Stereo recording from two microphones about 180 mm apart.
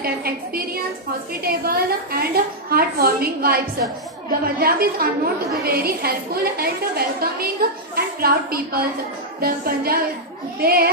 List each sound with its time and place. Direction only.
0.0 s a woman's voice: 55° right (ahead or behind)